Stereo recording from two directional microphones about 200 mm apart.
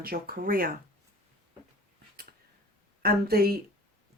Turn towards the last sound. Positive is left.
turn(degrees=-50)  # may be behind; listen again after turning